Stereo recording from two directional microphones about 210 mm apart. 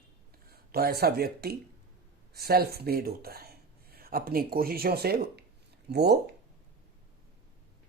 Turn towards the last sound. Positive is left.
turn(degrees=-50)  # may be behind; listen again after turning